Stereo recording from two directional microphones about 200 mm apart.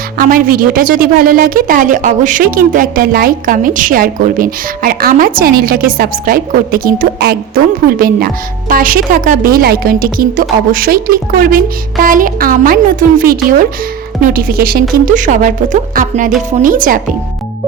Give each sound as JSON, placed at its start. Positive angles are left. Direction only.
{"t": 0.2, "sound": "a woman's voice", "side_deg": -45}